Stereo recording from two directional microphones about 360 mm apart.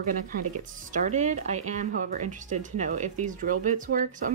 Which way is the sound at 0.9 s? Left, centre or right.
Centre.